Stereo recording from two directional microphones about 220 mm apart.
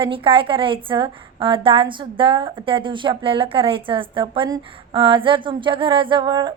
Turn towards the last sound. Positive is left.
turn(degrees=-20)  # may be behind; listen again after turning